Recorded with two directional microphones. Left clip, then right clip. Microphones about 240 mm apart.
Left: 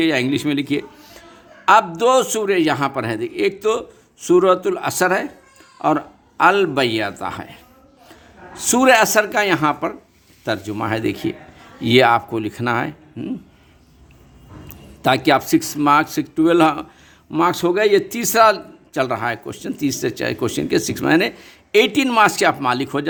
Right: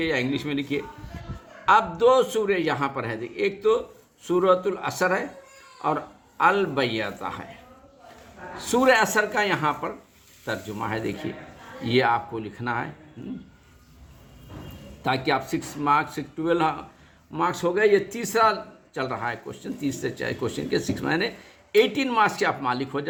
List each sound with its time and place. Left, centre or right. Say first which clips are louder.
0.0 s a man's voice: left 7 dB; left
8.6 s a man's voice: left 6 dB; left
15.0 s a man's voice: left 9 dB; left